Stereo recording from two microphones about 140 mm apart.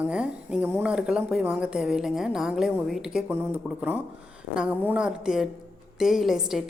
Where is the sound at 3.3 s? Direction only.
15° right (ahead or behind).